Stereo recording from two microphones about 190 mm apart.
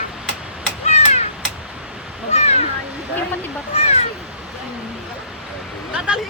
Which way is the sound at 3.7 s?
35° left (ahead or behind).